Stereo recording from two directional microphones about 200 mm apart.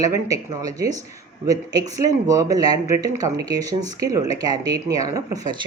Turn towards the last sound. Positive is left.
turn(degrees=-20)  # may be behind; listen again after turning